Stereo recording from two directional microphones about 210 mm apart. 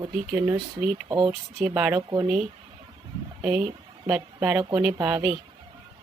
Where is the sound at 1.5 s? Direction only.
5° right (ahead or behind).